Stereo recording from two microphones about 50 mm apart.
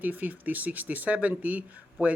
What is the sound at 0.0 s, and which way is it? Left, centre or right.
Speech, right.